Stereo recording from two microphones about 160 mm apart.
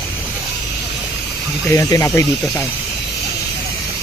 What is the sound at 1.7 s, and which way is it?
Speech, 20° left (ahead or behind).